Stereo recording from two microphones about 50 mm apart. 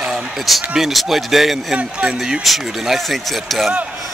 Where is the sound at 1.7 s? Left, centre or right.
Centre.